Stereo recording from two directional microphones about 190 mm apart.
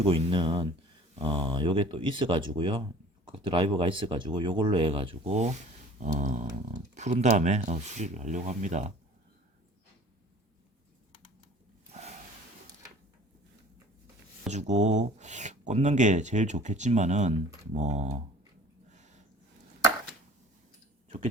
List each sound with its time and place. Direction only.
0.0 s speech: 25° right (ahead or behind)
6.1 s dog: 40° right (ahead or behind)
6.9 s speech: 35° right (ahead or behind)
14.4 s speech: 35° right (ahead or behind)
18.9 s a sound: 40° right (ahead or behind)